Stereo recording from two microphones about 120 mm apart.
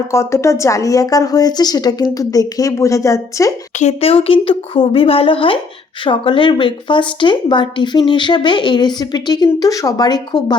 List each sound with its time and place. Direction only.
0.1 s speech: 25° left (ahead or behind)
3.8 s a woman's voice: 65° left (ahead or behind); by 10.6 s 35° left (ahead or behind)